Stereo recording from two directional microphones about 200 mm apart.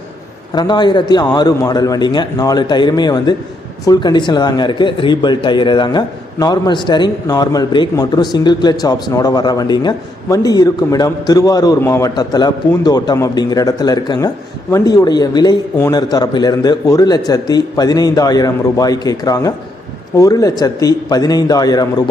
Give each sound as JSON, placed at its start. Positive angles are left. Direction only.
{"t": 0.5, "sound": "speech", "side_deg": 20}